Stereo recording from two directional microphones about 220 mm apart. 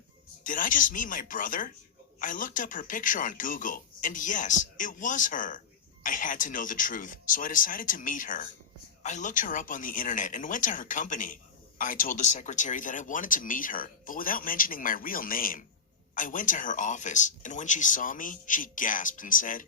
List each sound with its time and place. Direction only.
0.4 s speech: 35° left (ahead or behind)